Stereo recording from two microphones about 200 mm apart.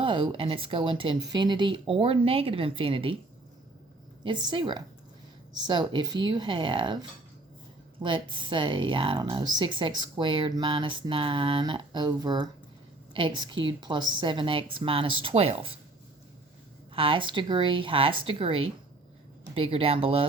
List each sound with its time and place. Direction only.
0.0 s speech: 25° right (ahead or behind)
4.2 s speech: 25° right (ahead or behind)
16.9 s speech: 25° right (ahead or behind)